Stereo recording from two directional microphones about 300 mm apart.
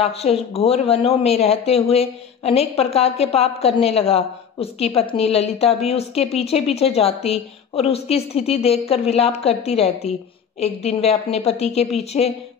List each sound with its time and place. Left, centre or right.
0.0 s a woman's voice: centre